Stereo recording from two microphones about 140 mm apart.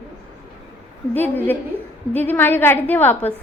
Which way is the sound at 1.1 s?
15° left (ahead or behind).